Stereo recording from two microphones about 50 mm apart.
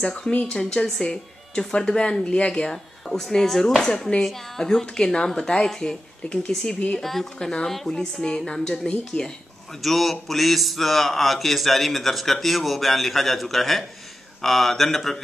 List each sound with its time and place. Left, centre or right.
0.0 s speech: centre
9.8 s speech: centre